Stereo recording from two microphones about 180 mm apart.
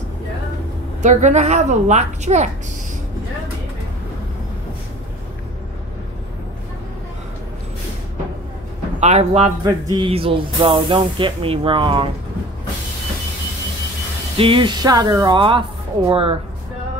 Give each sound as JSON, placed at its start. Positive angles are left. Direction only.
{"t": 1.0, "sound": "a woman's voice", "side_deg": -40}
{"t": 9.0, "sound": "a woman's voice", "side_deg": -35}
{"t": 9.7, "sound": "speech", "side_deg": -25}
{"t": 14.3, "sound": "a woman's voice", "side_deg": -30}